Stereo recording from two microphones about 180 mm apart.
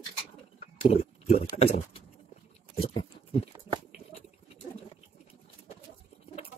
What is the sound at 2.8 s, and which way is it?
Pig, 30° left (ahead or behind).